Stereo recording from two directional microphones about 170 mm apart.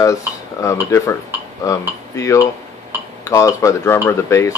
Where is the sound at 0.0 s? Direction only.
20° left (ahead or behind).